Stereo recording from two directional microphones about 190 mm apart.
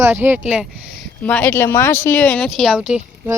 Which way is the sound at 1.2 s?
10° left (ahead or behind).